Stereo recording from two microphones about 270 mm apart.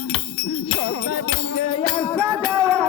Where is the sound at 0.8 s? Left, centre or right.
Left.